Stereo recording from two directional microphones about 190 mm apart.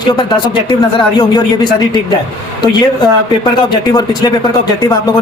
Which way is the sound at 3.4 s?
25° left (ahead or behind).